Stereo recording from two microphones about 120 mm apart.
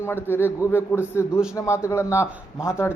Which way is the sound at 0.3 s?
20° left (ahead or behind).